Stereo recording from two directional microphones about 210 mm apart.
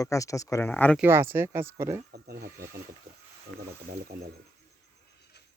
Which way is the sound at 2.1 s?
50° right (ahead or behind).